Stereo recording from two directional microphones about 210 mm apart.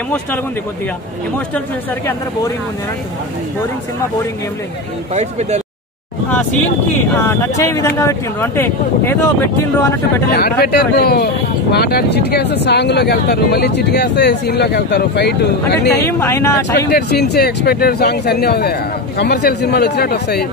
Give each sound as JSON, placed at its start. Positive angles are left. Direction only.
{"t": 5.1, "sound": "speech", "side_deg": -30}
{"t": 7.2, "sound": "speech", "side_deg": 15}
{"t": 10.3, "sound": "speech", "side_deg": 50}
{"t": 16.0, "sound": "speech", "side_deg": 10}
{"t": 16.7, "sound": "speech", "side_deg": 50}